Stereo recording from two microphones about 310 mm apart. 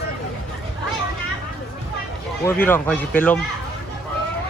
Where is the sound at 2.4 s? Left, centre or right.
Centre.